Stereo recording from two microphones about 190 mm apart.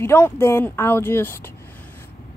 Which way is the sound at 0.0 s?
15° left (ahead or behind).